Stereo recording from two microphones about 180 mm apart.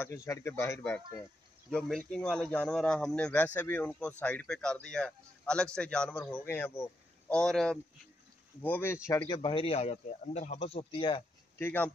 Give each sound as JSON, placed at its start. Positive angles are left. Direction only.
{"t": 0.0, "sound": "speech", "side_deg": 15}
{"t": 1.7, "sound": "a man's voice", "side_deg": 5}
{"t": 11.5, "sound": "speech", "side_deg": 10}